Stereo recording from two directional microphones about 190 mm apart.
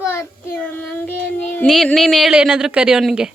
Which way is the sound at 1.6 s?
5° left (ahead or behind).